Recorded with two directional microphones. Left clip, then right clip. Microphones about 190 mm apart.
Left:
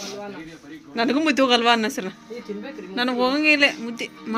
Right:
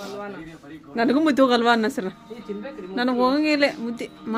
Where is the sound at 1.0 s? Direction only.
20° right (ahead or behind).